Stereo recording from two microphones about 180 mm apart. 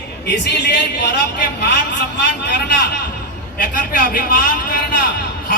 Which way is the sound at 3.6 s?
50° left (ahead or behind).